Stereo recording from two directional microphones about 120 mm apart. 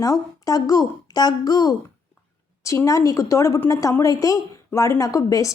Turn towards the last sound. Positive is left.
turn(degrees=30)  # may be behind; listen again after turning